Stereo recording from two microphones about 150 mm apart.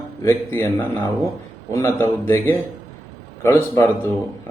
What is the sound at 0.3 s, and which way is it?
Speech, 15° left (ahead or behind).